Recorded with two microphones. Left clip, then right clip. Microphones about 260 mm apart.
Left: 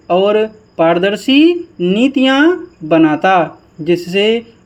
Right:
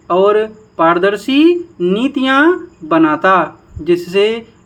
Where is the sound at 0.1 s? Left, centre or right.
Centre.